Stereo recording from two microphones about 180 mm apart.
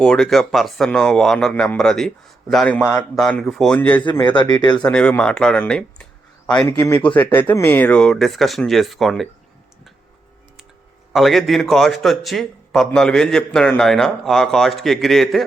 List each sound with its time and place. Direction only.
0.0 s a man's voice: 5° left (ahead or behind)
4.1 s speech: 25° left (ahead or behind)
4.8 s a man's voice: 5° left (ahead or behind)
11.1 s a man's voice: centre (ahead or behind)